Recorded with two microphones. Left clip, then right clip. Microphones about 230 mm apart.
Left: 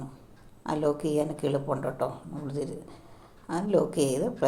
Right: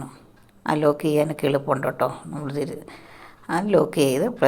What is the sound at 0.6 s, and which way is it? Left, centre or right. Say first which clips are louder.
A woman's voice: right 7 dB; right.